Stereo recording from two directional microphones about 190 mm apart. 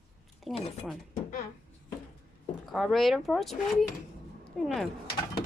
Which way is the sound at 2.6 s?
Centre (ahead or behind).